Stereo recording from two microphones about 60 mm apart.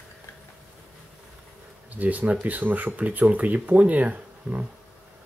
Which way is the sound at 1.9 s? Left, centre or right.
Right.